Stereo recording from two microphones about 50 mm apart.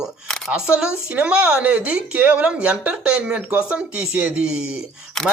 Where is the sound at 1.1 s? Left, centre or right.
Right.